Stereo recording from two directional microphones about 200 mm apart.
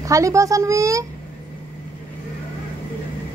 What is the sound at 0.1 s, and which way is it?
Speech, 15° right (ahead or behind).